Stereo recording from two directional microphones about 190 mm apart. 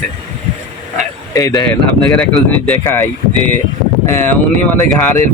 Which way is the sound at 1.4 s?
15° left (ahead or behind).